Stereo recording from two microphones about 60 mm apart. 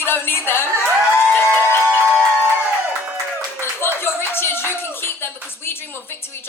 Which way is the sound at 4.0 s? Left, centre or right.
Left.